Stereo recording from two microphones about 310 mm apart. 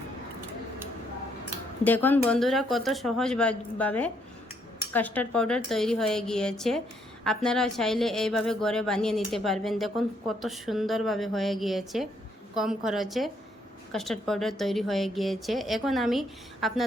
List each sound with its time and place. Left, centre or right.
1.8 s a woman's voice: centre